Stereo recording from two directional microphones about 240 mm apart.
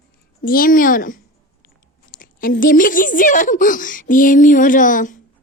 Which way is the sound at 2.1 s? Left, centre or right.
Left.